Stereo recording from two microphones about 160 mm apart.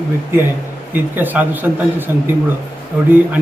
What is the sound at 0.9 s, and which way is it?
Speech, 10° right (ahead or behind).